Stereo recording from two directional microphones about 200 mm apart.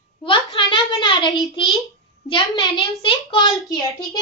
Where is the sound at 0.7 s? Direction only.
20° left (ahead or behind).